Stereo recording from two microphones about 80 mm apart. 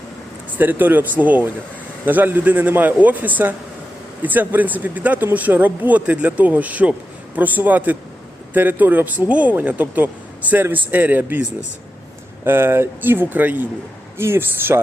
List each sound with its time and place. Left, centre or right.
0.5 s speech: right
12.5 s speech: right